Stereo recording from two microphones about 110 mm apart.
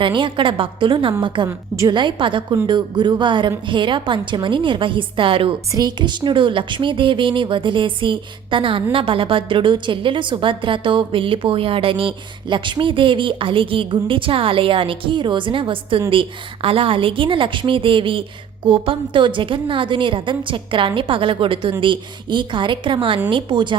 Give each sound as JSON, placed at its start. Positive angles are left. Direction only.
{"t": 0.0, "sound": "speech", "side_deg": -50}
{"t": 1.5, "sound": "a woman's voice", "side_deg": -25}
{"t": 1.9, "sound": "speech", "side_deg": -45}
{"t": 5.7, "sound": "speech", "side_deg": -40}